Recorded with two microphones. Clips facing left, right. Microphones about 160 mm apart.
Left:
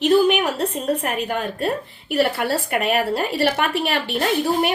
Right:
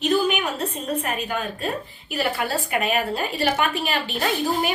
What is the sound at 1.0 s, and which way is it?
A woman's voice, 60° left (ahead or behind).